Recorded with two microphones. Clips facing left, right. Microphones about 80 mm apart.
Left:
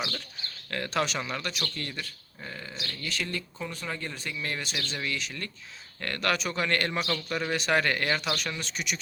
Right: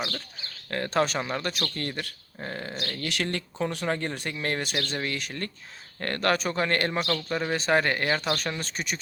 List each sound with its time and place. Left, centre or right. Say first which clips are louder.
0.7 s speech: right 4 dB; right
3.8 s speech: right 6 dB; right
8.2 s speech: right 3 dB; right